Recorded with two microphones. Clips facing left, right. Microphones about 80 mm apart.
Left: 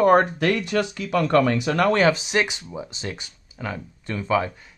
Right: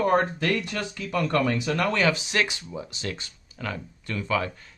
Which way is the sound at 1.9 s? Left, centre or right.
Left.